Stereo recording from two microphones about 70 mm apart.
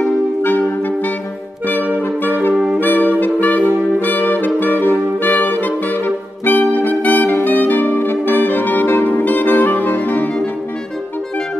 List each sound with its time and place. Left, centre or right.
0.4 s clarinet: left
2.5 s saxophone: centre
2.8 s saxophone: left
7.4 s music: left